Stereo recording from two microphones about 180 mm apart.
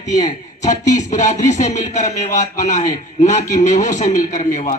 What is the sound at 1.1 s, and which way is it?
Speech, 45° left (ahead or behind).